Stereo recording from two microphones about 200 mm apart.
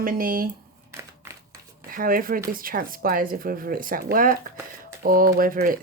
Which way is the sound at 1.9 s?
45° right (ahead or behind).